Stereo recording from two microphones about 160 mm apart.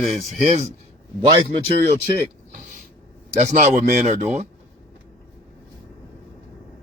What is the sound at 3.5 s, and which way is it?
Speech, 45° right (ahead or behind).